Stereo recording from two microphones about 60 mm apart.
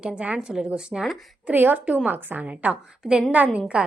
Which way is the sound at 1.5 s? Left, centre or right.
Right.